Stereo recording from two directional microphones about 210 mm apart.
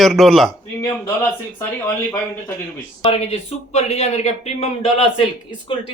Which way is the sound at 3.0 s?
30° left (ahead or behind).